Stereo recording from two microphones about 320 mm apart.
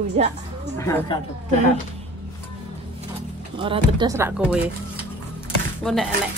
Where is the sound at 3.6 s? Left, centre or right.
Centre.